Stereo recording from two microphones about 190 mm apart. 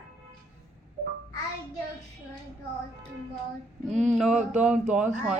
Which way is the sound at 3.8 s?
40° right (ahead or behind).